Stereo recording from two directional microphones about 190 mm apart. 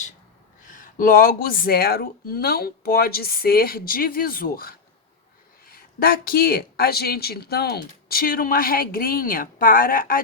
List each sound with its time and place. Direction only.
0.7 s speech: 45° left (ahead or behind)